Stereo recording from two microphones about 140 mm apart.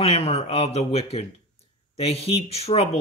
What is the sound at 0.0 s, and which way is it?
Speech, 45° left (ahead or behind).